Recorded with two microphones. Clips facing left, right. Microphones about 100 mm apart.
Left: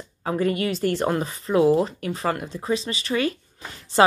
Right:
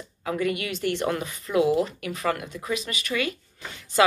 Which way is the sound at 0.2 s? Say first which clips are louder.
Left 4 dB; 35° left (ahead or behind).